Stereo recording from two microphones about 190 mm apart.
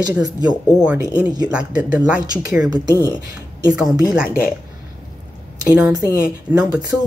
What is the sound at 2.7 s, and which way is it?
Speech, 20° right (ahead or behind).